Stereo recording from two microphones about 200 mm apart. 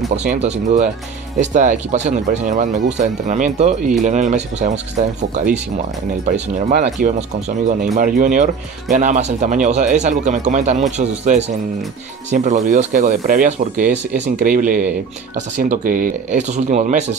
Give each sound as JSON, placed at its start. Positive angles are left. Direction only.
{"t": 0.3, "sound": "speech", "side_deg": -35}
{"t": 6.8, "sound": "speech", "side_deg": -35}